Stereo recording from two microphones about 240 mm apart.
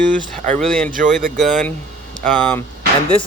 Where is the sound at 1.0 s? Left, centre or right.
Right.